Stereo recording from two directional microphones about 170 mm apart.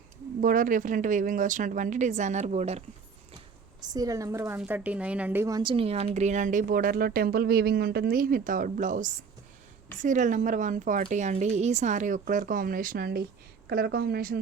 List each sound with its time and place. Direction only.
0.4 s a woman's voice: 50° right (ahead or behind)
3.8 s a woman's voice: 25° right (ahead or behind); by 14.3 s 65° right (ahead or behind)